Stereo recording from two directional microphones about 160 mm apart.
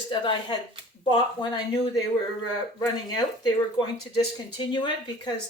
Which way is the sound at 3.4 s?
30° left (ahead or behind).